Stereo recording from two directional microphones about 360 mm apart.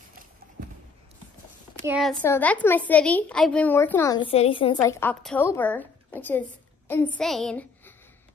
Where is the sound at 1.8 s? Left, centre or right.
Centre.